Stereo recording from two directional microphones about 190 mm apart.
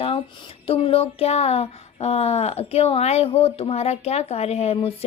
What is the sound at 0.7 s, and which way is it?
Speech, 30° left (ahead or behind).